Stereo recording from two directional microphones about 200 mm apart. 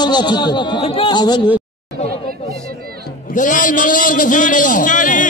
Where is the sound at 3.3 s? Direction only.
40° left (ahead or behind).